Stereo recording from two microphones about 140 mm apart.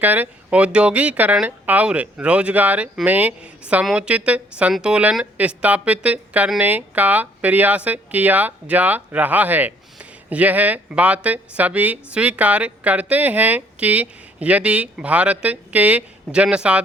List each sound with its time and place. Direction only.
0.0 s speech: 10° right (ahead or behind)